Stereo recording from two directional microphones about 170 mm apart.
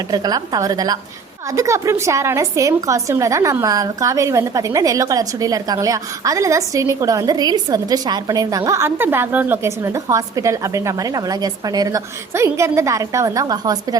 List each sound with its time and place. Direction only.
0.1 s a woman's voice: 25° right (ahead or behind)